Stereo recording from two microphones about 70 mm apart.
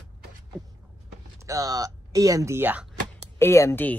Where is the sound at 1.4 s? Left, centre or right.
Right.